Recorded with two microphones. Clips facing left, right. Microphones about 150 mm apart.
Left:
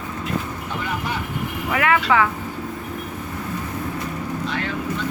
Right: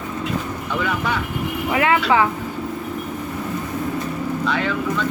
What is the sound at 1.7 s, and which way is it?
Speech, 25° right (ahead or behind).